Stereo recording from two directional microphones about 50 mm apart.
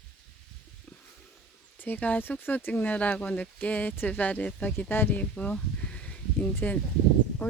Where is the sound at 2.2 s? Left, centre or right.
Left.